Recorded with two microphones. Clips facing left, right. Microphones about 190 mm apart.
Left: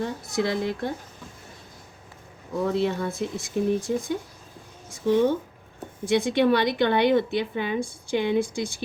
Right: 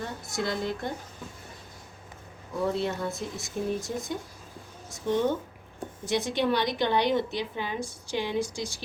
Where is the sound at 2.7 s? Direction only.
65° left (ahead or behind).